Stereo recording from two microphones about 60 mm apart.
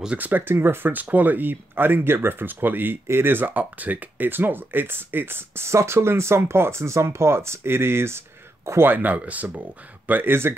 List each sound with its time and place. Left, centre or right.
0.2 s speech: right
8.8 s speech: right